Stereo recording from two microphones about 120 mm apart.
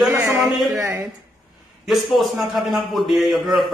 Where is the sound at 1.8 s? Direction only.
Centre (ahead or behind).